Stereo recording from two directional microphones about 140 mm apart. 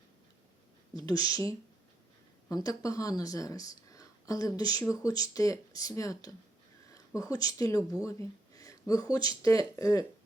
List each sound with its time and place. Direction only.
1.0 s speech: 25° left (ahead or behind)
8.0 s a sound: 25° left (ahead or behind)
9.1 s speech: 25° left (ahead or behind)